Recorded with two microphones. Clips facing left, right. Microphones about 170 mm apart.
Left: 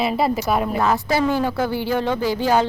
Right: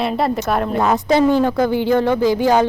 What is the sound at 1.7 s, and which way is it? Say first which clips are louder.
Speech: right 6 dB; 15° right (ahead or behind).